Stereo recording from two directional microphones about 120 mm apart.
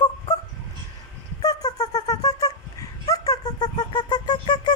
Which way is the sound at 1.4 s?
35° left (ahead or behind).